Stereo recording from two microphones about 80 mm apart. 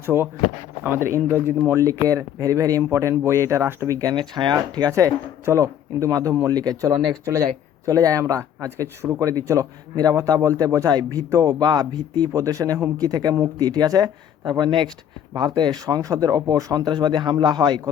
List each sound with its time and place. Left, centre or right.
0.0 s speech: right
1.7 s speech: right
3.8 s speech: right
4.1 s speech: right
4.5 s speech: right
6.5 s speech: right
7.1 s speech: right
9.3 s speech: right
11.6 s speech: right
16.8 s speech: right